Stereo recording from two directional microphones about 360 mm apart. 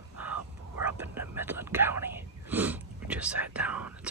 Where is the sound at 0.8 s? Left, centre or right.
Centre.